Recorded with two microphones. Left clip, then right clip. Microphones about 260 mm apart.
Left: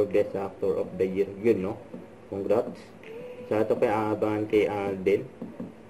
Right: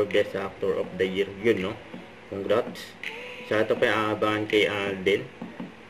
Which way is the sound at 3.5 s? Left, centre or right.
Right.